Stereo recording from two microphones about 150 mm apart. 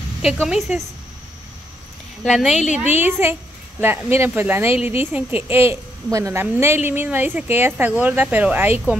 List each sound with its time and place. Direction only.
0.2 s a woman's voice: centre (ahead or behind)
2.2 s speech: centre (ahead or behind)